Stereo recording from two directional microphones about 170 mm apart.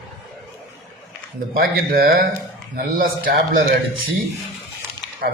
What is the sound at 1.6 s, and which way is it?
Speech, 60° right (ahead or behind).